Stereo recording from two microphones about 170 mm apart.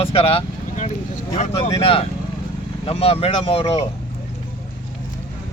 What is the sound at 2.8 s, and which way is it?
Speech, 35° left (ahead or behind).